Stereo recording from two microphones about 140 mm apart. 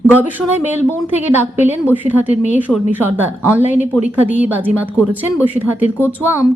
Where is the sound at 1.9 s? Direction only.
10° right (ahead or behind).